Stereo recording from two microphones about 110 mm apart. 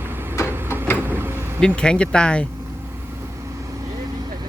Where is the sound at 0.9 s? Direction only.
20° right (ahead or behind).